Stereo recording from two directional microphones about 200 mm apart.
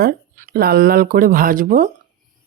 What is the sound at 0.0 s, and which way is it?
Speech, 45° right (ahead or behind).